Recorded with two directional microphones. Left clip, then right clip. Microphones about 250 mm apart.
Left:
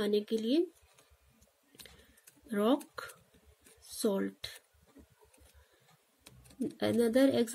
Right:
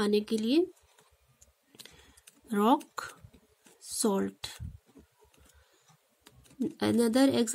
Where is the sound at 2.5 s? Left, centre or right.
Right.